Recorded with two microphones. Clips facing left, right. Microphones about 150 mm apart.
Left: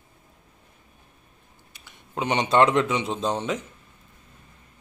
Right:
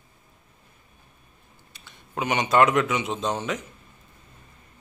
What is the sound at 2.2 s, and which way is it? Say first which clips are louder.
A man's voice: even; 25° left (ahead or behind).